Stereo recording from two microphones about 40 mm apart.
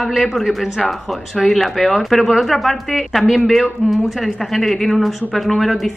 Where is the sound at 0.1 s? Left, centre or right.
Centre.